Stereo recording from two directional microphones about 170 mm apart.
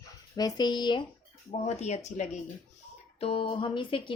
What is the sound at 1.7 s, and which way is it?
A woman's voice, 40° left (ahead or behind).